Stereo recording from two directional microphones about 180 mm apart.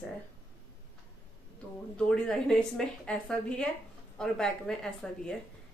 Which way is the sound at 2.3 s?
5° left (ahead or behind).